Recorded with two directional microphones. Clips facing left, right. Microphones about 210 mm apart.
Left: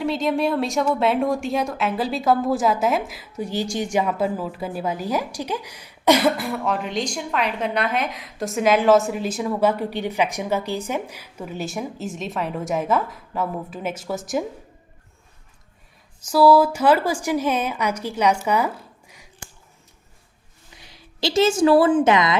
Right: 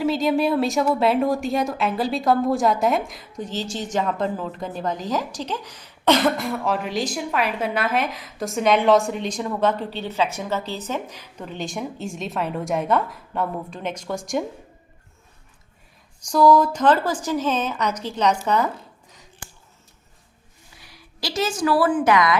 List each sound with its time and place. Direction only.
0.0 s speech: centre (ahead or behind)
16.2 s a woman's voice: 5° left (ahead or behind)
20.8 s a woman's voice: 25° left (ahead or behind)